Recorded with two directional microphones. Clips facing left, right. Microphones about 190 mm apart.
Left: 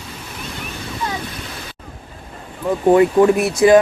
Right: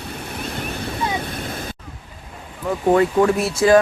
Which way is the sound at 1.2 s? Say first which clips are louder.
Right 3 dB; 50° right (ahead or behind).